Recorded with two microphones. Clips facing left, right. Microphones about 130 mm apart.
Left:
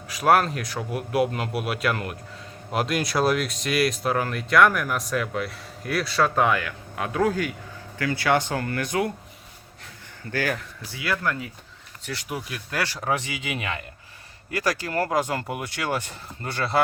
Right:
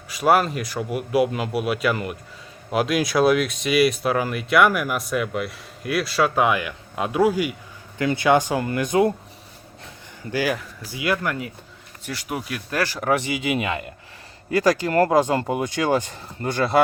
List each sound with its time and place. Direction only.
0.1 s speech: centre (ahead or behind); by 9.1 s 25° right (ahead or behind)
10.3 s speech: 10° right (ahead or behind)
13.5 s speech: 20° right (ahead or behind)
15.7 s speech: 15° right (ahead or behind)